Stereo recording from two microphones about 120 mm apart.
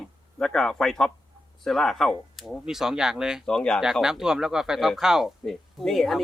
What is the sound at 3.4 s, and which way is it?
Speech, 5° left (ahead or behind).